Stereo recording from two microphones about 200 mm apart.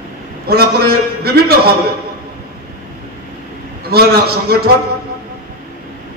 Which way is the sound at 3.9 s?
50° right (ahead or behind).